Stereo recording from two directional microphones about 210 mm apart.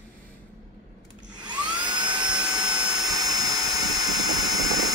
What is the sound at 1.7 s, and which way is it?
Dental drill, 20° right (ahead or behind).